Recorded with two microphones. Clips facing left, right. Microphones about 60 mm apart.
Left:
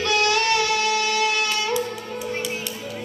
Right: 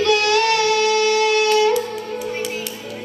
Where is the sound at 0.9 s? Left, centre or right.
Right.